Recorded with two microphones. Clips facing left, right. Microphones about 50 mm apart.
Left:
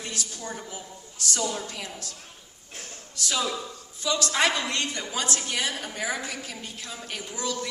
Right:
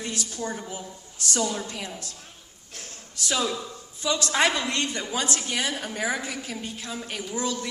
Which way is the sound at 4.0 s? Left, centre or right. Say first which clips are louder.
Right 1 dB; right.